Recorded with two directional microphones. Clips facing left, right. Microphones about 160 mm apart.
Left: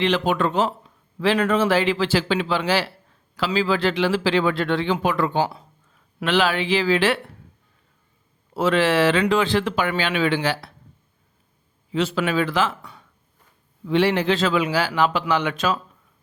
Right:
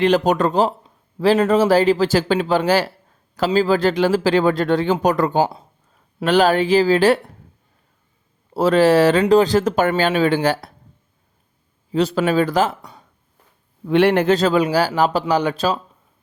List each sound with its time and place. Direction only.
0.0 s a man's voice: 45° right (ahead or behind)
8.5 s a man's voice: 40° right (ahead or behind)
11.9 s a man's voice: 40° right (ahead or behind)
13.8 s a man's voice: 55° right (ahead or behind); by 15.8 s 35° right (ahead or behind)